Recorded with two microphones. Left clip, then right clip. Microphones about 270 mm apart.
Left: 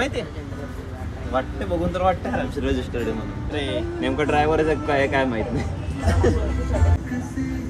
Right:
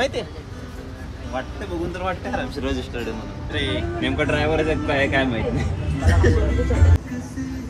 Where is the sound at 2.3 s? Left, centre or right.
Centre.